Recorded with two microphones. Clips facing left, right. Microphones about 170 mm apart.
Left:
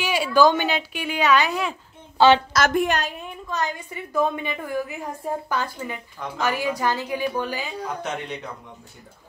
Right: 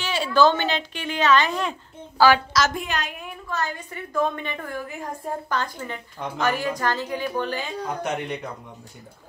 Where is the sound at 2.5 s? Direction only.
55° left (ahead or behind).